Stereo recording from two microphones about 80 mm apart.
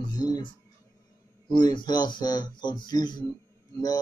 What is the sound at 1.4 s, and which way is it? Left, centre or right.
Speech, left.